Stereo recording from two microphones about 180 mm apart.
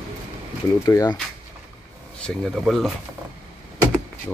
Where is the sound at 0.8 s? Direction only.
20° left (ahead or behind).